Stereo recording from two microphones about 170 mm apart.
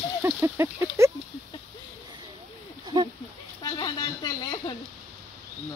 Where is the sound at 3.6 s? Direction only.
25° left (ahead or behind).